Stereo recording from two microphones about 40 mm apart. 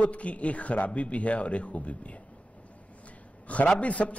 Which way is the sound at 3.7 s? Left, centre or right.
Left.